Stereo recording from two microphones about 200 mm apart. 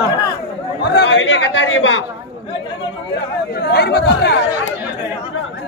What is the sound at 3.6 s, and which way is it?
Speech, 55° left (ahead or behind).